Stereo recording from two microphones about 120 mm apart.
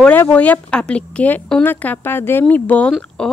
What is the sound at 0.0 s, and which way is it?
Speech, 15° left (ahead or behind).